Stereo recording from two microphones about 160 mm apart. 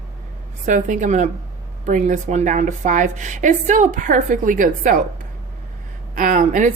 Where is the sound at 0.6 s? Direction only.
50° right (ahead or behind).